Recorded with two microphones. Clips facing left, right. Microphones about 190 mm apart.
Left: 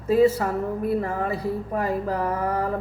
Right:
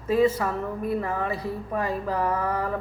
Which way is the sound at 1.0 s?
35° left (ahead or behind).